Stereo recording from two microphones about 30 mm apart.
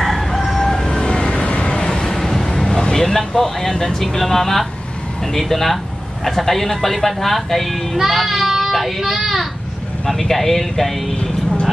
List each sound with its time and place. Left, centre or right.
0.0 s crowing: centre
0.6 s vehicle: centre
1.0 s vehicle: left
2.0 s vehicle: centre
3.2 s speech: centre
8.1 s child singing: centre
9.1 s a child's voice: centre
10.0 s speech: centre